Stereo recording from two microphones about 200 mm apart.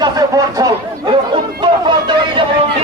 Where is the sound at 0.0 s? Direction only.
20° right (ahead or behind).